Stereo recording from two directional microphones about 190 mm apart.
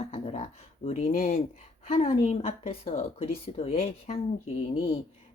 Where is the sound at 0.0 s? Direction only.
30° left (ahead or behind).